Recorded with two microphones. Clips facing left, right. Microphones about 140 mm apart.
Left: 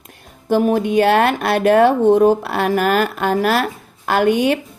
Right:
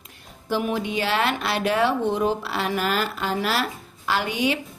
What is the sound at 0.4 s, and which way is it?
A woman's voice, 50° left (ahead or behind).